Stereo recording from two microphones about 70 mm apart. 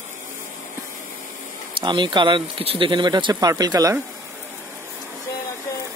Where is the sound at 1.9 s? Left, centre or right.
Right.